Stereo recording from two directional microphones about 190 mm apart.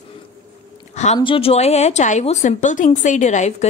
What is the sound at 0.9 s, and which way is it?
Speech, 35° left (ahead or behind).